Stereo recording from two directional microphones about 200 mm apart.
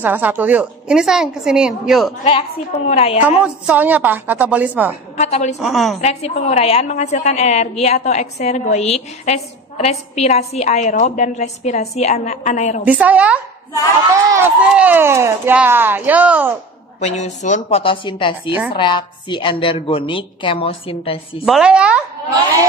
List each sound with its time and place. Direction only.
0.0 s a woman's voice: 10° right (ahead or behind)
2.9 s a woman's voice: 30° left (ahead or behind)
3.2 s speech: 5° right (ahead or behind)
5.1 s a woman's voice: 35° left (ahead or behind)
5.6 s a woman's voice: centre (ahead or behind)
5.9 s a woman's voice: 30° left (ahead or behind)
12.8 s speech: 5° right (ahead or behind)
17.0 s a woman's voice: 35° left (ahead or behind)
21.5 s a woman's voice: 5° right (ahead or behind)